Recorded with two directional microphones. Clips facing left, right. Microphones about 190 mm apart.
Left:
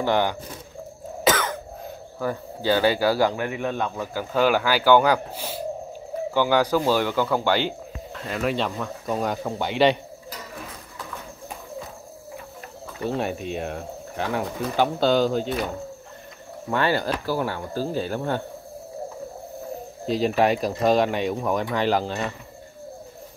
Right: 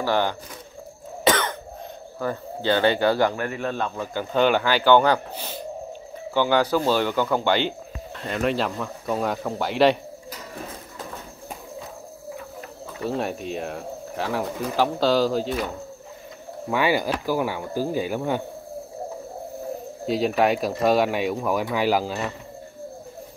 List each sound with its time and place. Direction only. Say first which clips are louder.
0.0 s speech: left 1 dB; 15° left (ahead or behind)
1.2 s cough: right 1 dB; 5° left (ahead or behind)
2.1 s speech: even; 10° left (ahead or behind)
13.0 s speech: even; centre (ahead or behind)
16.7 s speech: right 1 dB; 10° right (ahead or behind)
20.1 s speech: even; centre (ahead or behind)